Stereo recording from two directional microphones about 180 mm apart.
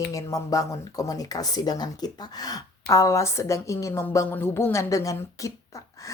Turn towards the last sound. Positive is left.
turn(degrees=20)  # may be behind; listen again after turning